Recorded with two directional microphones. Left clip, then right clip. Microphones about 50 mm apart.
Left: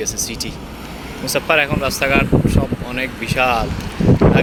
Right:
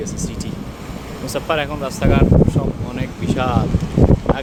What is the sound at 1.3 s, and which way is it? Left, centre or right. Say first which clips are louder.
Speech: left 5 dB; centre.